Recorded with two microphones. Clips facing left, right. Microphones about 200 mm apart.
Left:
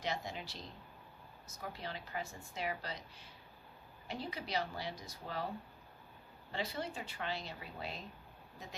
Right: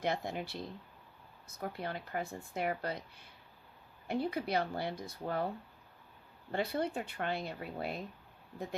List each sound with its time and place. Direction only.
0.0 s speech: 55° right (ahead or behind)
6.5 s speech: 55° right (ahead or behind)